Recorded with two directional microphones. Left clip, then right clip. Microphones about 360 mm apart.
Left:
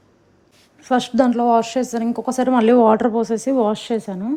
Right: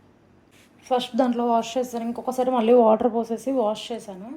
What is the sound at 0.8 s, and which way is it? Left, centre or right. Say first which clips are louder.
A woman's voice: left 5 dB; left.